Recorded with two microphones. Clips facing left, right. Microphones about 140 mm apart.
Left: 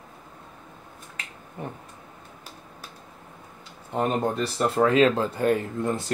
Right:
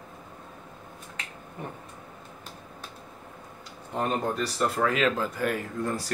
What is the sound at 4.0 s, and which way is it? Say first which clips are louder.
Speech: left 3 dB; 25° left (ahead or behind).